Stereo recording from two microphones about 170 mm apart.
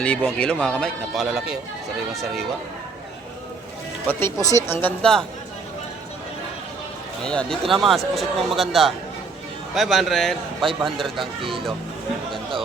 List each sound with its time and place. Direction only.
0.0 s speech: 5° left (ahead or behind)
4.1 s speech: 15° left (ahead or behind)
7.2 s speech: 5° left (ahead or behind)
12.3 s speech: 30° right (ahead or behind)